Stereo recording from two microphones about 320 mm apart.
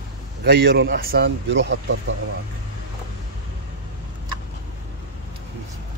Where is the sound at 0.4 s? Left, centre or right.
Right.